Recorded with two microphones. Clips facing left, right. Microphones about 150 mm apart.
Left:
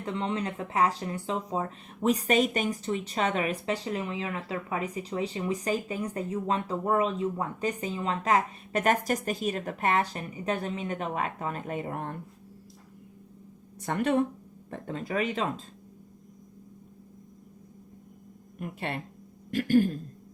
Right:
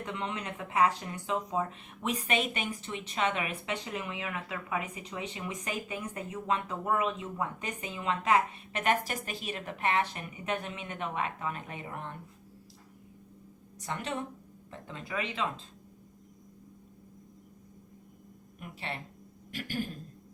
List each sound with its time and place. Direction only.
0.0 s speech: 30° left (ahead or behind); by 12.1 s 45° left (ahead or behind)
13.8 s speech: 55° left (ahead or behind)
18.6 s speech: 50° left (ahead or behind)